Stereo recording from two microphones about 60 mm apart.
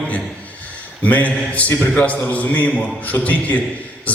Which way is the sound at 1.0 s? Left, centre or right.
Left.